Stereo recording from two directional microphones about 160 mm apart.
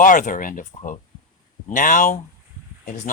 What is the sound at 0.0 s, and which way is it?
Speech, 55° left (ahead or behind).